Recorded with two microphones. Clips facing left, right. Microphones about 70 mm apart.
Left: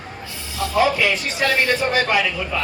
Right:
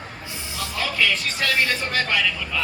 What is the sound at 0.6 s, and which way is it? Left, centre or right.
A man's voice, left.